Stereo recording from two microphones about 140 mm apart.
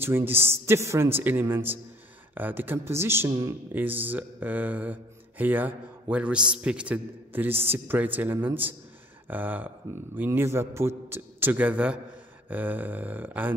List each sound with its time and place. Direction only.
0.3 s a man's voice: 15° right (ahead or behind)
3.7 s a man's voice: 15° right (ahead or behind)